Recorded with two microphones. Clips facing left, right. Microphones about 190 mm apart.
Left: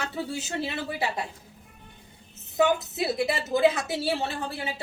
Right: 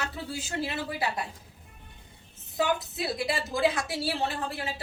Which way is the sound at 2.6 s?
25° left (ahead or behind).